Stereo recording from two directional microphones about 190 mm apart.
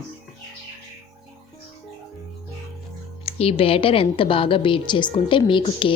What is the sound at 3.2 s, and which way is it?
A woman's voice, 30° left (ahead or behind).